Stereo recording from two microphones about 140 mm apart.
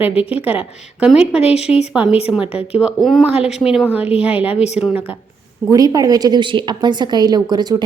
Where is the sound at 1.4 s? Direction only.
50° left (ahead or behind).